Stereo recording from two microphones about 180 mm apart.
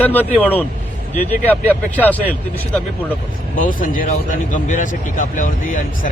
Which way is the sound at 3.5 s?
50° left (ahead or behind).